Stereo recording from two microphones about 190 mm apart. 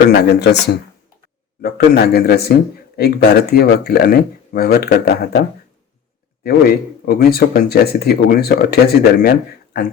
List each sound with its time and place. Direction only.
0.1 s speech: 60° left (ahead or behind)
6.4 s speech: 55° left (ahead or behind)